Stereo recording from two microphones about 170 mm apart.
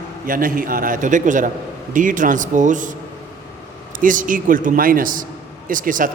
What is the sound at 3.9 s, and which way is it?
A man's voice, 50° right (ahead or behind).